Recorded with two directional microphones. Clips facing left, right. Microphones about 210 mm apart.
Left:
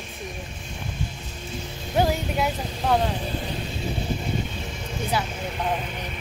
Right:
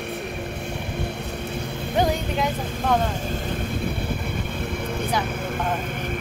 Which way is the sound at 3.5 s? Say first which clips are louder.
Right 3 dB; 55° right (ahead or behind).